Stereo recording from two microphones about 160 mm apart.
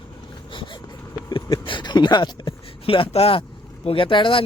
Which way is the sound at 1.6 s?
30° left (ahead or behind).